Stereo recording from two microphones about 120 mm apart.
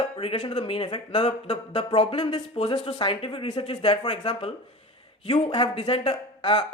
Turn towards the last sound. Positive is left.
turn(degrees=50)  # may be behind; listen again after turning